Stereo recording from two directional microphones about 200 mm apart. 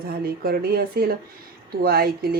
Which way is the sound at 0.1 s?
50° right (ahead or behind).